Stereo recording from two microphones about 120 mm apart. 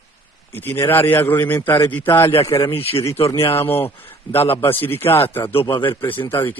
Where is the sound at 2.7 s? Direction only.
55° left (ahead or behind).